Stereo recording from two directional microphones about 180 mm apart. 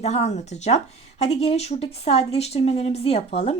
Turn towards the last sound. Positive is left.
turn(degrees=35)  # may be behind; listen again after turning